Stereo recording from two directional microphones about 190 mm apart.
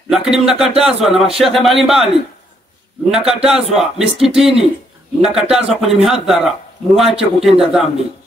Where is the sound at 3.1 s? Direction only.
5° right (ahead or behind).